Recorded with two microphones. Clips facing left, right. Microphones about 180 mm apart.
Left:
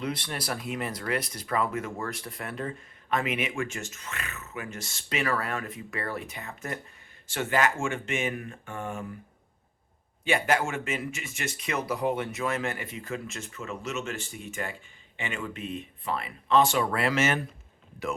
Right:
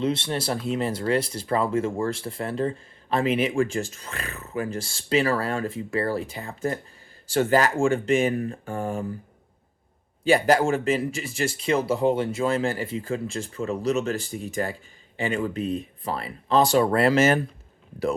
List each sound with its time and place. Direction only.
0.0 s speech: 25° right (ahead or behind)
10.2 s speech: 35° right (ahead or behind)